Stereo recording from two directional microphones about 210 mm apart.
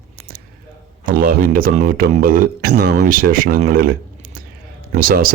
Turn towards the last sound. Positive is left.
turn(degrees=-45)  # may be behind; listen again after turning